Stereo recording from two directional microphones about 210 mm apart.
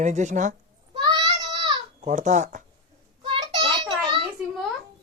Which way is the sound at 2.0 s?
35° right (ahead or behind).